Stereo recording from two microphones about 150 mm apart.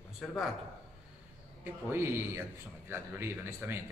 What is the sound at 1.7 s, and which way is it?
Speech, 15° right (ahead or behind).